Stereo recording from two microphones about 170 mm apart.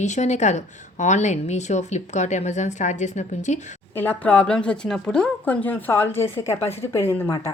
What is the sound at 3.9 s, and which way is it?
Speech, 10° left (ahead or behind).